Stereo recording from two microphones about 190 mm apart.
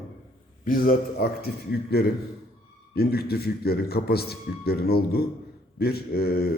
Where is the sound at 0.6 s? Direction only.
50° left (ahead or behind).